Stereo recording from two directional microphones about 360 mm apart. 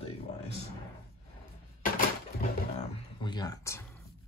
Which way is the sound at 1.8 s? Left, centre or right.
Left.